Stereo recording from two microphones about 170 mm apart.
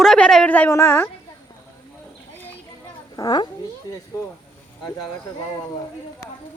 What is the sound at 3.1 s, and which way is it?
Speech, 25° left (ahead or behind).